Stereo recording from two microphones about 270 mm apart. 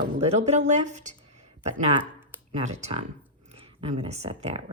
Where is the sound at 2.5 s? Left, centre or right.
Right.